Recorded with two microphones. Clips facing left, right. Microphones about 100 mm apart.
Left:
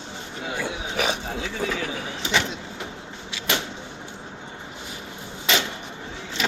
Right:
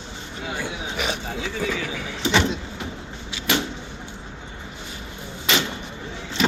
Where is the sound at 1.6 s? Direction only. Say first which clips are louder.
Even; 35° left (ahead or behind).